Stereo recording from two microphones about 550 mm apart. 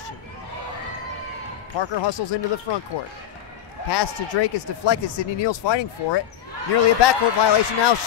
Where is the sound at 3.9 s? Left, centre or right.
Left.